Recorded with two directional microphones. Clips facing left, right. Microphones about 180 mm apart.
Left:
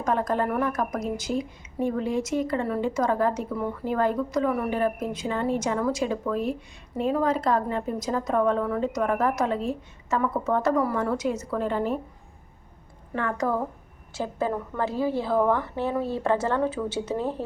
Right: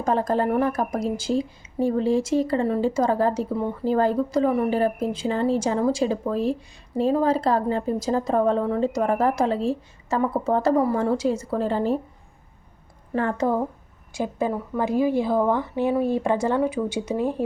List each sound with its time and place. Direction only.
0.0 s a woman's voice: 30° right (ahead or behind)
13.1 s a woman's voice: 30° right (ahead or behind)
14.1 s a woman's voice: 15° right (ahead or behind)